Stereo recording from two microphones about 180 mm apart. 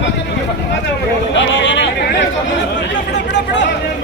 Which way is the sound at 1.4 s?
90° left.